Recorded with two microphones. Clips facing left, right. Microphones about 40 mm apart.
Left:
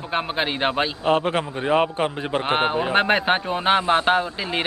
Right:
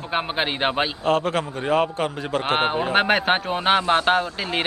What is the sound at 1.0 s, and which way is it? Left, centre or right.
A man's voice, left.